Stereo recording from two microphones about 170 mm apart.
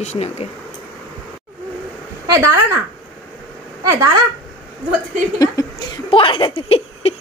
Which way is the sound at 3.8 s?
15° right (ahead or behind).